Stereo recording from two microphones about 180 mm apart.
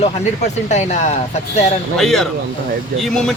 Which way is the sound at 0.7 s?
40° left (ahead or behind).